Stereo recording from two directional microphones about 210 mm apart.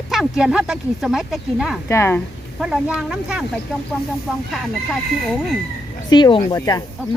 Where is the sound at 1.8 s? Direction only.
10° left (ahead or behind).